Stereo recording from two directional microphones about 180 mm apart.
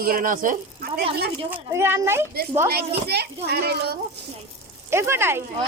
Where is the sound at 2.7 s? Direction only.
65° right (ahead or behind).